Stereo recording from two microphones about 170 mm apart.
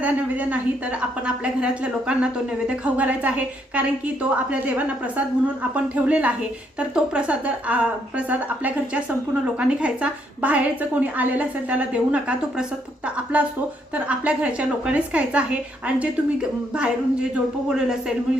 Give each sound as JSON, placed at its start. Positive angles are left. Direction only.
{"t": 0.0, "sound": "a woman's voice", "side_deg": -10}
{"t": 1.6, "sound": "a woman's voice", "side_deg": -5}
{"t": 5.7, "sound": "a woman's voice", "side_deg": -5}
{"t": 16.7, "sound": "a woman's voice", "side_deg": -5}